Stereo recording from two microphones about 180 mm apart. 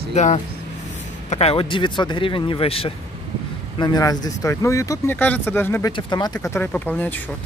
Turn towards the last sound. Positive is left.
turn(degrees=10)  # may be behind; listen again after turning